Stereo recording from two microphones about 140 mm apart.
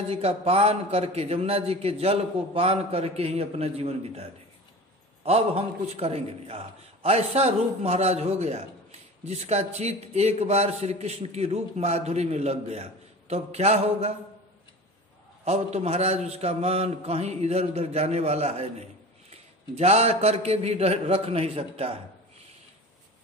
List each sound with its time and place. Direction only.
0.1 s a man's voice: 45° right (ahead or behind)
15.4 s a man's voice: 50° right (ahead or behind)